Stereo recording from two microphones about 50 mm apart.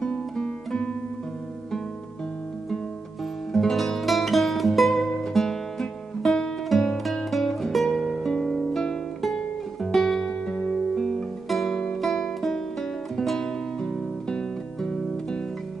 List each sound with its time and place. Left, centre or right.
0.0 s guitar: centre
3.5 s music: centre
10.2 s music: left
11.4 s music: centre